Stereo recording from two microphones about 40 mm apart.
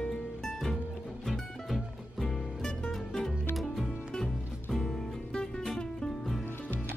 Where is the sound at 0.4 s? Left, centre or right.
Centre.